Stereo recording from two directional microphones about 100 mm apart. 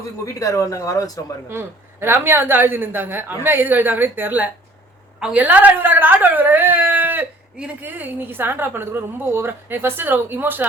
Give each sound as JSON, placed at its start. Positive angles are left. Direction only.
{"t": 0.3, "sound": "speech", "side_deg": 35}
{"t": 1.5, "sound": "a woman's voice", "side_deg": -25}